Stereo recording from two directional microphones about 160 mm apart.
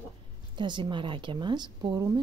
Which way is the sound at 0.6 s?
30° right (ahead or behind).